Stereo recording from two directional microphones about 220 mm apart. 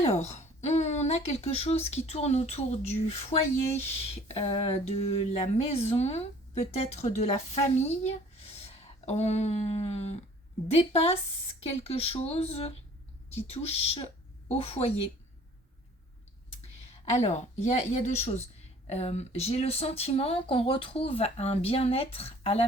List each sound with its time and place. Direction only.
0.0 s speech: 30° left (ahead or behind)
17.1 s speech: 30° left (ahead or behind)